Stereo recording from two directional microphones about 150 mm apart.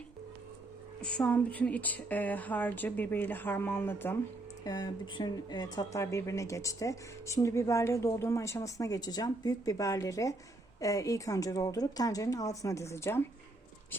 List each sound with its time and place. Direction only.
1.0 s a woman's voice: 5° left (ahead or behind)
4.6 s speech: 25° left (ahead or behind)